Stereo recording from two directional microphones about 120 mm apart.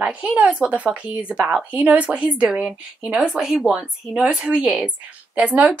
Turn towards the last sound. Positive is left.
turn(degrees=-15)  # may be behind; listen again after turning